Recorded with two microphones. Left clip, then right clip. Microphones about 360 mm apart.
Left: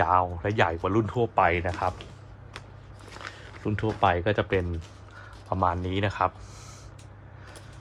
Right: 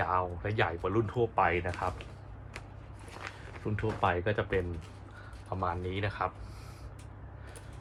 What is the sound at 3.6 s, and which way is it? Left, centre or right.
Speech, left.